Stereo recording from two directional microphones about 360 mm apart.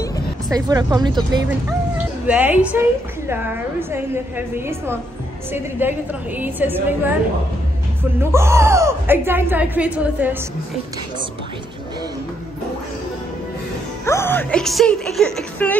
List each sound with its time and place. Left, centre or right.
0.5 s speech: centre
3.9 s a woman's voice: centre
8.2 s speech: centre
14.0 s a woman's voice: centre